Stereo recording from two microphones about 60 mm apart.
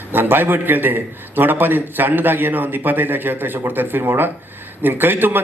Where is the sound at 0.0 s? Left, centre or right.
Right.